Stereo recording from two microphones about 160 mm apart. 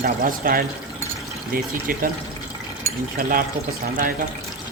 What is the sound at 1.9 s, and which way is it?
Speech, 60° right (ahead or behind).